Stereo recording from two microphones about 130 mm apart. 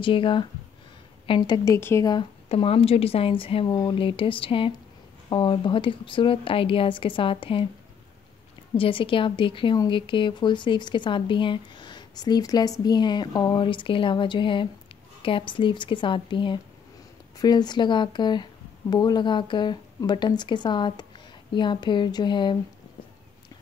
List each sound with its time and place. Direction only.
0.0 s a woman's voice: 40° left (ahead or behind)
1.6 s speech: 20° left (ahead or behind)
2.5 s a woman's voice: 45° left (ahead or behind)
3.6 s a woman's voice: 30° left (ahead or behind)
8.7 s speech: 45° left (ahead or behind)